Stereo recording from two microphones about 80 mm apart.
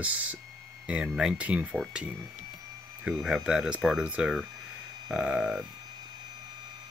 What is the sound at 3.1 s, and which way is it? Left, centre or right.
Speech, centre.